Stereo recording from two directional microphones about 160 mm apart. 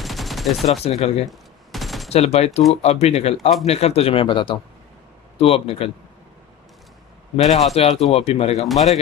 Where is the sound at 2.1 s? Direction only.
40° left (ahead or behind).